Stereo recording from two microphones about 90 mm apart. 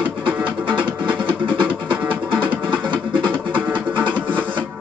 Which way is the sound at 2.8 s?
15° left (ahead or behind).